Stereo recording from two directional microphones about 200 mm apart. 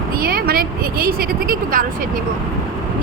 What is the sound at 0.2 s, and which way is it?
Speech, 50° right (ahead or behind).